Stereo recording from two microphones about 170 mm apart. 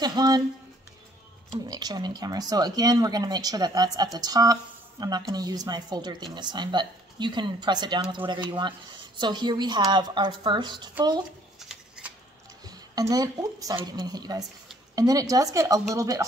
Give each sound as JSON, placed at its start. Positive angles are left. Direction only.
{"t": 0.0, "sound": "speech", "side_deg": -25}
{"t": 1.5, "sound": "speech", "side_deg": -25}
{"t": 12.6, "sound": "a woman's voice", "side_deg": -20}